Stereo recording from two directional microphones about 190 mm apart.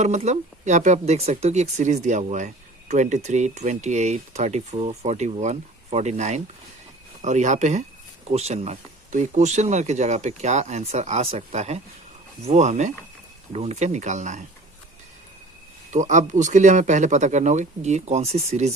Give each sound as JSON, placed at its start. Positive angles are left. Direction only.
{"t": 0.0, "sound": "speech", "side_deg": -40}
{"t": 15.9, "sound": "speech", "side_deg": -40}